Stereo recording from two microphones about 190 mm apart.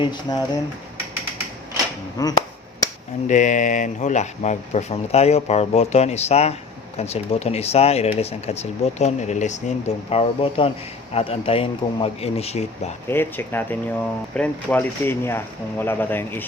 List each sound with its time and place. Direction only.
0.0 s speech: 20° left (ahead or behind)
2.2 s speech: 20° left (ahead or behind)
3.2 s speech: 40° left (ahead or behind)
13.1 s speech: 10° left (ahead or behind)